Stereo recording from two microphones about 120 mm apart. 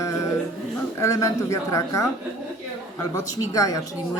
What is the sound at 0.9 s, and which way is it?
A man's voice, 25° left (ahead or behind).